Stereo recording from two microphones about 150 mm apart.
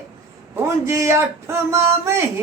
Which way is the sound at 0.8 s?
20° right (ahead or behind).